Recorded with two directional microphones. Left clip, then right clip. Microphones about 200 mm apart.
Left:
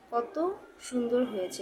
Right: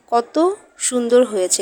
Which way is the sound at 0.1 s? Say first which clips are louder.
Right 14 dB; 40° right (ahead or behind).